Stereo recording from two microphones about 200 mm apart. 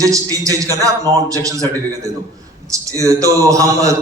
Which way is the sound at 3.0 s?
15° right (ahead or behind).